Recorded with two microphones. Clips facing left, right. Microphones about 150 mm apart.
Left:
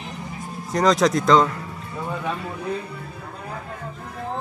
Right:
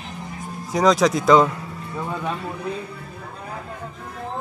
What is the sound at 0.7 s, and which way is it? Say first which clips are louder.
Speech: right 1 dB; centre (ahead or behind).